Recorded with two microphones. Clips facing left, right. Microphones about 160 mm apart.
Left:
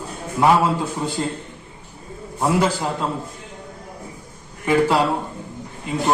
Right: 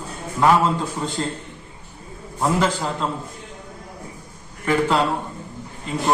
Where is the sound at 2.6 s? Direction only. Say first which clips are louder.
Left 1 dB; 10° left (ahead or behind).